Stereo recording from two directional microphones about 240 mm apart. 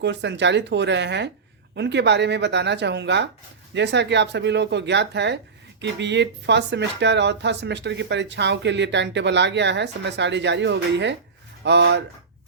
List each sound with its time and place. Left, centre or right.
0.0 s speech: right